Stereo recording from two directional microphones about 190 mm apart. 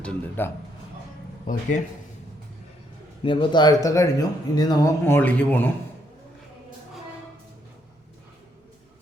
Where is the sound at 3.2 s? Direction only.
25° left (ahead or behind); by 5.7 s 10° left (ahead or behind).